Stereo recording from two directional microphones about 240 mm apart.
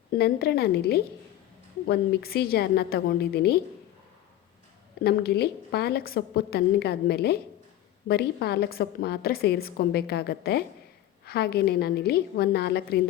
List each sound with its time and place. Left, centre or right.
0.1 s a woman's voice: left
5.0 s a woman's voice: left